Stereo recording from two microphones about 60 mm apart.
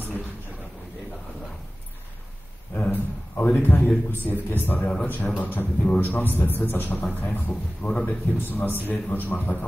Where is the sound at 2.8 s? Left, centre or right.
Left.